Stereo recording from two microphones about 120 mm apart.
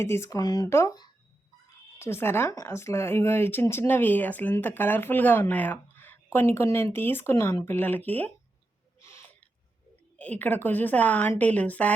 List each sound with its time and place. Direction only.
0.0 s speech: 25° left (ahead or behind)
2.0 s speech: 20° left (ahead or behind)
9.0 s owl: 25° left (ahead or behind)
9.2 s a sound: 10° left (ahead or behind)
10.2 s a woman's voice: 15° left (ahead or behind)